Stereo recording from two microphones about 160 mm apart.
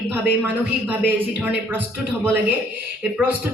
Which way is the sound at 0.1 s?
10° right (ahead or behind).